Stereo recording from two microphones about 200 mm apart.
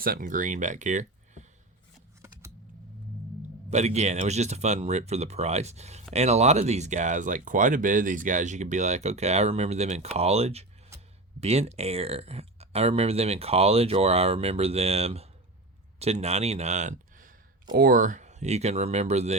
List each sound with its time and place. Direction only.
0.0 s speech: 45° right (ahead or behind)
3.7 s speech: 35° right (ahead or behind)